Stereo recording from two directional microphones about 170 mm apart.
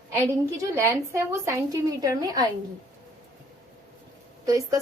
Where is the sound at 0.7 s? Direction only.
15° right (ahead or behind).